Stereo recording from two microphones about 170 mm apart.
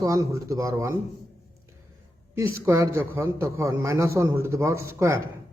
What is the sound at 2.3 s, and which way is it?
A man's voice, 15° right (ahead or behind).